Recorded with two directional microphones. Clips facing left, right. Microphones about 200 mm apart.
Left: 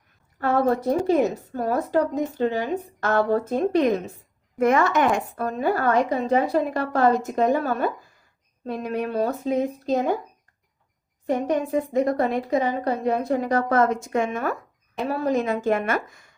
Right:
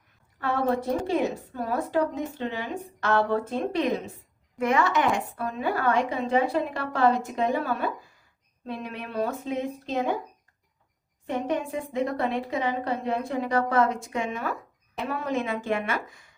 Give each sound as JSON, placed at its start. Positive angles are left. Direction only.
{"t": 0.3, "sound": "a woman's voice", "side_deg": 40}
{"t": 11.3, "sound": "speech", "side_deg": 40}
{"t": 15.0, "sound": "a woman's voice", "side_deg": 35}